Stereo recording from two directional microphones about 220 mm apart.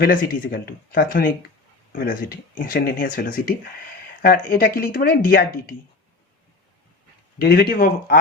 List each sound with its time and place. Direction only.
0.0 s speech: 40° left (ahead or behind)
7.3 s speech: 45° left (ahead or behind)